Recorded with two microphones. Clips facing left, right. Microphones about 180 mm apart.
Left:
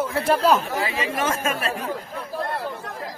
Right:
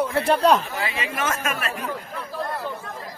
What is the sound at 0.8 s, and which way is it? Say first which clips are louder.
Speech: left 2 dB; 35° left (ahead or behind).